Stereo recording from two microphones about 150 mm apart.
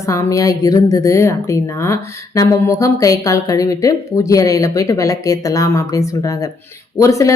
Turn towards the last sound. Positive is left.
turn(degrees=20)  # may be behind; listen again after turning